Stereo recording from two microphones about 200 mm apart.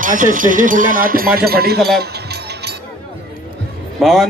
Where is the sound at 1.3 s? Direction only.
50° right (ahead or behind).